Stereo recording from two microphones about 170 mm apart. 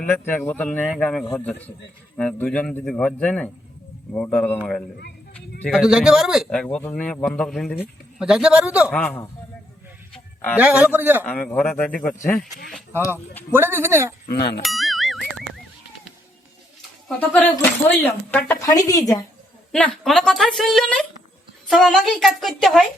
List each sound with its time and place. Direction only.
0.0 s speech: 10° left (ahead or behind)
5.3 s a sound: 5° left (ahead or behind)
5.8 s speech: 5° right (ahead or behind)
8.9 s speech: 10° left (ahead or behind)
10.1 s a sound: 10° left (ahead or behind)
10.6 s a man's voice: 10° right (ahead or behind)
11.2 s speech: 5° left (ahead or behind)
13.5 s a man's voice: 15° right (ahead or behind)
14.3 s speech: 65° left (ahead or behind)
14.6 s a sound: centre (ahead or behind)
17.2 s speech: 10° left (ahead or behind)
18.9 s a woman's voice: 20° left (ahead or behind)
19.7 s speech: 5° left (ahead or behind)